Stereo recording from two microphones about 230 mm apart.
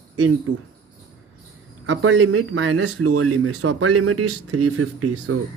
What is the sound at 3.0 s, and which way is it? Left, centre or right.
Speech, right.